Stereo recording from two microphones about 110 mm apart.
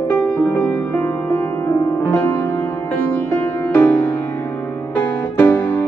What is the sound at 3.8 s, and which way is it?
Music, 15° left (ahead or behind).